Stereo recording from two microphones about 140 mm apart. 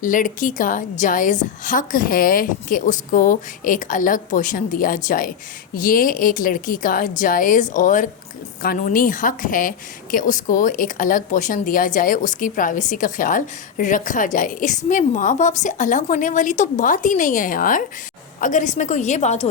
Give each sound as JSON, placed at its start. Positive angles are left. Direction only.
{"t": 0.0, "sound": "a woman's voice", "side_deg": 70}
{"t": 8.6, "sound": "a woman's voice", "side_deg": 85}
{"t": 18.3, "sound": "a woman's voice", "side_deg": 65}